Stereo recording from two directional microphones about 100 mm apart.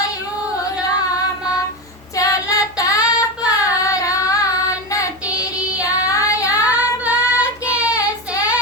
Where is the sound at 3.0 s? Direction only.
10° right (ahead or behind).